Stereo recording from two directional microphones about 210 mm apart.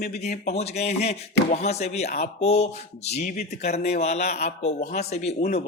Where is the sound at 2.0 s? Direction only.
50° left (ahead or behind).